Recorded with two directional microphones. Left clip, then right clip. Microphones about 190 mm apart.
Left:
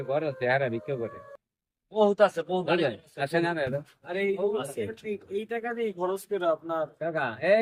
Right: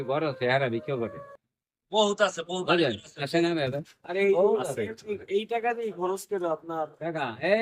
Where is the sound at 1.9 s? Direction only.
25° left (ahead or behind).